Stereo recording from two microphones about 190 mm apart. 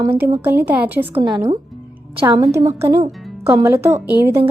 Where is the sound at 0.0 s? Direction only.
10° right (ahead or behind).